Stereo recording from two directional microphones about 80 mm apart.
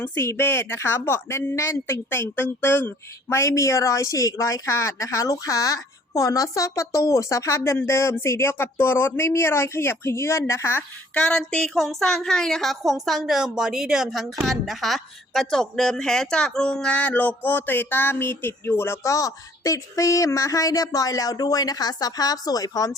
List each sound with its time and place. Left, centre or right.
0.0 s speech: left
11.1 s a woman's voice: centre; by 23.0 s left